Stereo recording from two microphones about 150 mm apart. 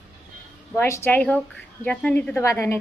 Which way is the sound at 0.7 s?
15° left (ahead or behind).